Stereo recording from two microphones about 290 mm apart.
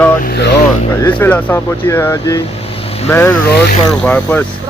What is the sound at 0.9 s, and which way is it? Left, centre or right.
Speech, centre.